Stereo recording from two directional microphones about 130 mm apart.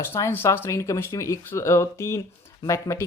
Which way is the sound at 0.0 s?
20° left (ahead or behind).